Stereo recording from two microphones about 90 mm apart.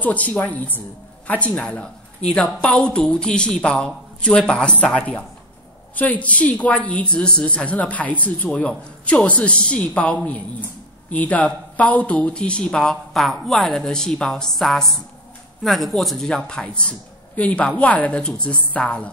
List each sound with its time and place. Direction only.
0.0 s a woman's voice: 15° left (ahead or behind)